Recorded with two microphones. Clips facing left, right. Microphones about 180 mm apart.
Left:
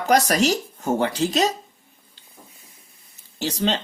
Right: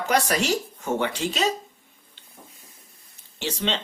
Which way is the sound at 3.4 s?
40° left (ahead or behind).